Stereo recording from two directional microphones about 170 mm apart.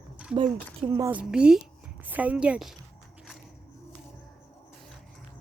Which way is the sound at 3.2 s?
5° right (ahead or behind).